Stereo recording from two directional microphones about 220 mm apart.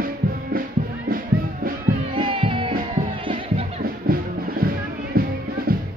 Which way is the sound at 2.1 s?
25° right (ahead or behind).